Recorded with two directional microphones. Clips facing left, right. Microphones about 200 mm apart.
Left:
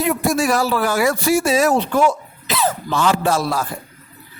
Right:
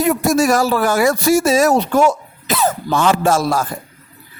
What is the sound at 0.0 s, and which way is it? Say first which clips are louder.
Speech: right 4 dB; 45° right (ahead or behind).